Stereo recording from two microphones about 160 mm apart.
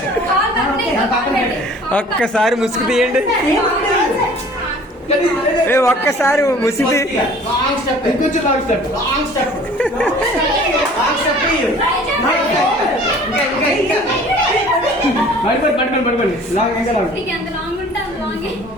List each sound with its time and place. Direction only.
1.9 s speech: 5° left (ahead or behind)
5.6 s speech: 15° left (ahead or behind)
9.7 s dog: 5° left (ahead or behind)